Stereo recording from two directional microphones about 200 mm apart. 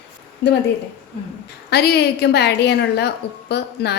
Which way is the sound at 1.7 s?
55° left (ahead or behind).